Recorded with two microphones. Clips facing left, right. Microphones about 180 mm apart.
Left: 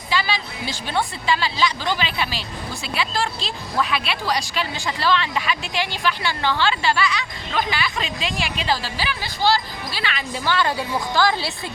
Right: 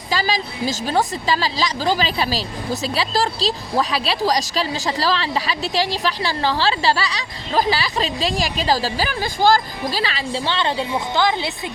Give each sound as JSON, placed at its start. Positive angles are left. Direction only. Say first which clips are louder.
{"t": 0.1, "sound": "speech", "louder": "right 2 dB", "side_deg": -40}